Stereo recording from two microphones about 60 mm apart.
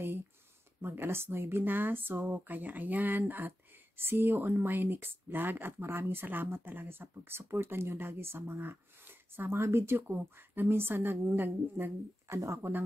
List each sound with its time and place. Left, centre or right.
0.8 s speech: right
12.3 s speech: right